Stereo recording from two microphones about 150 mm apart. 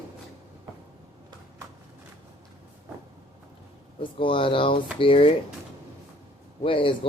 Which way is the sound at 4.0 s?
35° left (ahead or behind).